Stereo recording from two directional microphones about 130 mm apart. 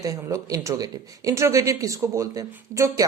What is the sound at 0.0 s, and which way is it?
Speech, 25° right (ahead or behind).